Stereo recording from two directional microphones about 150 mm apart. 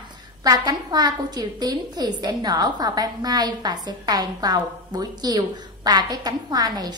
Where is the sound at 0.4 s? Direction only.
25° right (ahead or behind).